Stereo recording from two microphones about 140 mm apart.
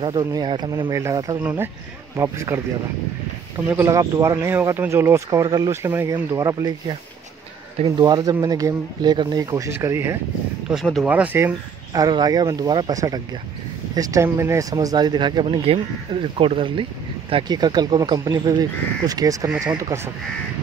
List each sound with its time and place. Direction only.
0.0 s speech: 30° right (ahead or behind)
1.4 s speech: 15° right (ahead or behind)
3.6 s speech: 15° right (ahead or behind)
8.0 s speech: 30° right (ahead or behind)
10.7 s speech: centre (ahead or behind)
11.9 s speech: 25° right (ahead or behind)